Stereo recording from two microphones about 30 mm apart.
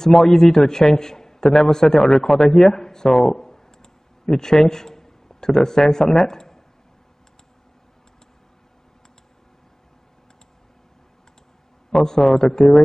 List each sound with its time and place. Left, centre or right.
0.0 s a man's voice: centre
11.9 s a man's voice: centre